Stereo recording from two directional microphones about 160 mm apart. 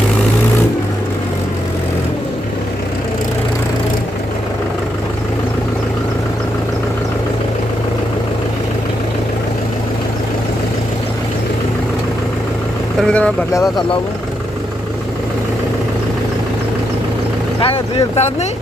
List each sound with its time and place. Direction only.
13.1 s speech: 5° left (ahead or behind)
13.5 s speech: 20° left (ahead or behind)
17.6 s speech: 35° left (ahead or behind)